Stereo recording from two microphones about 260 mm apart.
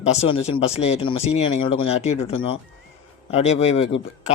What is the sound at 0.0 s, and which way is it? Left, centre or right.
A man's voice, left.